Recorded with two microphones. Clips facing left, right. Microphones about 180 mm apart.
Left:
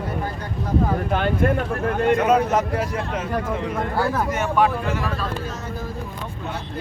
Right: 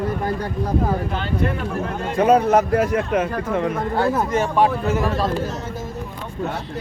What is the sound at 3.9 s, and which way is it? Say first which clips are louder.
Speech: right 3 dB; 20° right (ahead or behind).